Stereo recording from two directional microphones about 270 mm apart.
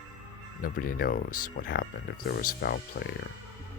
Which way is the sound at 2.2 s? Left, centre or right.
Left.